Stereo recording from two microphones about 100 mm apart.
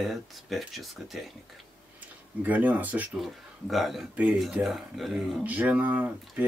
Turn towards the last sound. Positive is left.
turn(degrees=-15)  # may be behind; listen again after turning